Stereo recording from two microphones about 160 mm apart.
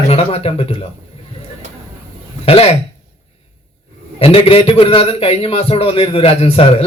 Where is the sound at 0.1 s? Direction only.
35° left (ahead or behind).